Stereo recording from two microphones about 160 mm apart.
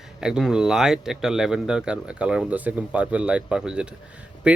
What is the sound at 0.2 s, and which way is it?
Speech, 5° right (ahead or behind).